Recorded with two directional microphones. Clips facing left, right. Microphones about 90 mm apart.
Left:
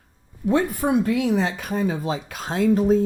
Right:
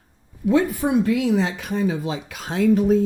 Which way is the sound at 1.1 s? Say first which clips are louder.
Right 1 dB; 45° left (ahead or behind).